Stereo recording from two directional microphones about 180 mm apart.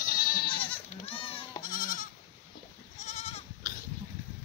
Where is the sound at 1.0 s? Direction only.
30° left (ahead or behind).